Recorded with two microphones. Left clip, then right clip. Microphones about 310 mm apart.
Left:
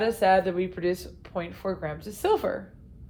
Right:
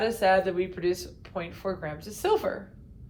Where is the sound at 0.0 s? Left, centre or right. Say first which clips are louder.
Left 1 dB; left.